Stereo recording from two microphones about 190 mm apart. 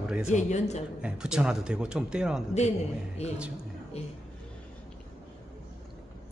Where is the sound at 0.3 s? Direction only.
40° left (ahead or behind).